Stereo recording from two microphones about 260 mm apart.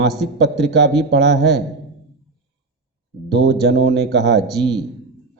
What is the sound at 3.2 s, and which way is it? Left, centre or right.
Speech, right.